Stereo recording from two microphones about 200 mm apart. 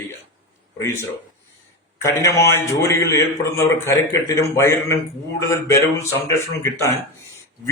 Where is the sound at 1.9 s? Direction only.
15° left (ahead or behind).